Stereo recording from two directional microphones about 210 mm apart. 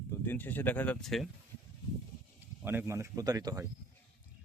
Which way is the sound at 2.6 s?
10° right (ahead or behind).